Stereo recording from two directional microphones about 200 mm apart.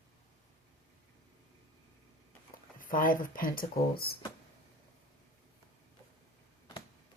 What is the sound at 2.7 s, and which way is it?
Speech, 45° left (ahead or behind).